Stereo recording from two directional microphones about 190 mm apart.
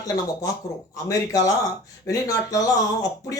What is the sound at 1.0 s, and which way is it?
Speech, 15° left (ahead or behind).